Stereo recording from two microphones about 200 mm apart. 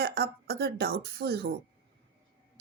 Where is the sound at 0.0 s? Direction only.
55° right (ahead or behind).